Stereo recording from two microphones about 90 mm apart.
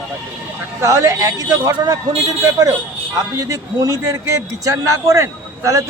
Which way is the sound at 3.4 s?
40° right (ahead or behind).